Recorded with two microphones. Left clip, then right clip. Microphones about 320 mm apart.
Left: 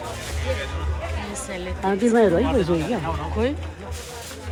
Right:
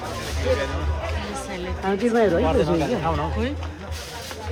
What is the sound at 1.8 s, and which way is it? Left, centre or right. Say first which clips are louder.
Speech: left 2 dB; left.